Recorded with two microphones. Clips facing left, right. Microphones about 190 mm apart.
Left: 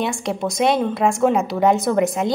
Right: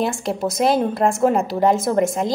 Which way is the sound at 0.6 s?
Centre (ahead or behind).